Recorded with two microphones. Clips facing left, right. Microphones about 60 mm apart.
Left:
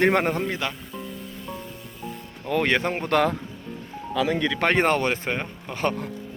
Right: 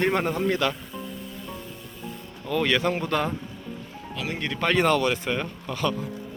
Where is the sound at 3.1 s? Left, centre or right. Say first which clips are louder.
Left 5 dB; left.